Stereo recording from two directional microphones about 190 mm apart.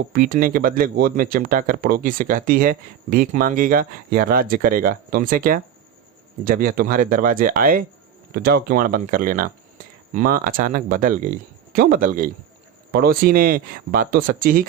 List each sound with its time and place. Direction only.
0.1 s speech: 50° right (ahead or behind)